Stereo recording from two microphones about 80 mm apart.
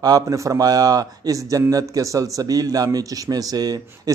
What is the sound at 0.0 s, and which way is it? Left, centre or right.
A man's voice, right.